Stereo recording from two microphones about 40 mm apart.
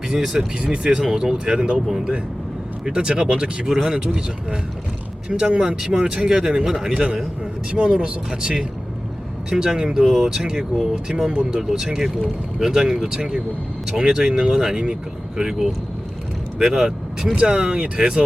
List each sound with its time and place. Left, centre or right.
0.1 s speech: centre
2.8 s speech: right
5.3 s speech: right
5.5 s speech: centre
11.3 s speech: right